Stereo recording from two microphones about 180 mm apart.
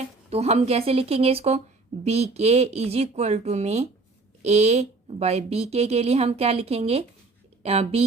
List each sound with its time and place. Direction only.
0.3 s a woman's voice: 35° right (ahead or behind)